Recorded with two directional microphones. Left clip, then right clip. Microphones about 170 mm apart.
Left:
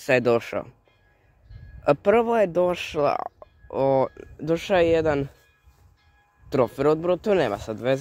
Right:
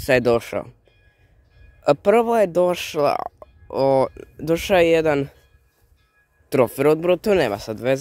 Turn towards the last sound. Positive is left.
turn(degrees=-25)  # may be behind; listen again after turning